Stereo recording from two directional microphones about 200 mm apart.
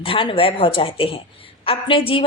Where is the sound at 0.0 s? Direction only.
25° left (ahead or behind).